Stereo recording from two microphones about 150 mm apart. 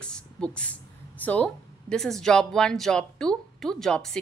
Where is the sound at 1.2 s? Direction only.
10° left (ahead or behind).